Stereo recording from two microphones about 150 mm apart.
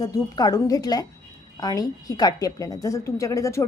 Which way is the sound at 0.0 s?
25° left (ahead or behind).